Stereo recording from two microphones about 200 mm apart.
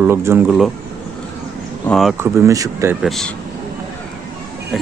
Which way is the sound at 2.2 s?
15° right (ahead or behind).